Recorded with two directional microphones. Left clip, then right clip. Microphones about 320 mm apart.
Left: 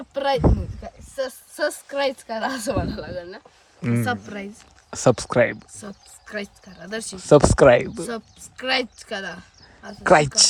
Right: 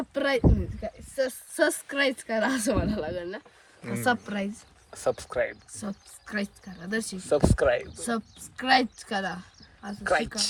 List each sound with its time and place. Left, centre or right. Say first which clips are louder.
0.1 s a sound: left 5 dB; centre
1.1 s a woman's voice: left 1 dB; centre
5.0 s speech: left 9 dB; left
5.8 s a woman's voice: even; centre
7.3 s speech: left 11 dB; left
8.0 s speech: left 1 dB; centre
10.0 s speech: left 10 dB; centre